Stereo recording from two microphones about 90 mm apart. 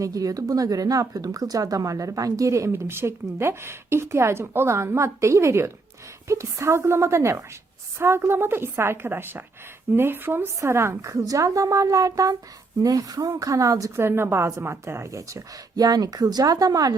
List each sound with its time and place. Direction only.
0.0 s a woman's voice: 40° right (ahead or behind)